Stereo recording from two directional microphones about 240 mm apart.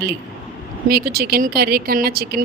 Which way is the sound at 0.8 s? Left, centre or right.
Right.